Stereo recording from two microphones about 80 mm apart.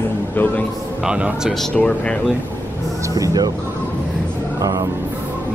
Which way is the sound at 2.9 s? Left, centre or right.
Right.